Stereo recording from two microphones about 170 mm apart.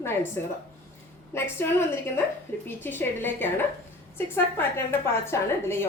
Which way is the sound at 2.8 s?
10° left (ahead or behind).